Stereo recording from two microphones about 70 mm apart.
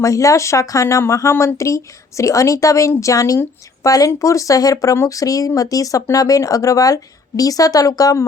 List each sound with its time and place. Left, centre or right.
0.0 s speech: left